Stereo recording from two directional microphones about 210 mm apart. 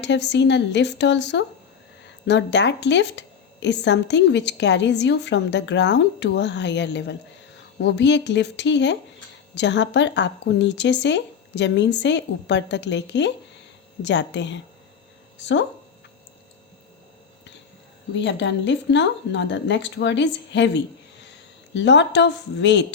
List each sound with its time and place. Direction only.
0.0 s a woman's voice: 55° left (ahead or behind)
18.1 s a woman's voice: 60° left (ahead or behind)